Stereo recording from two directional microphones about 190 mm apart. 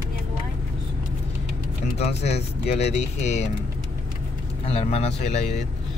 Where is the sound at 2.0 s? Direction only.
35° left (ahead or behind).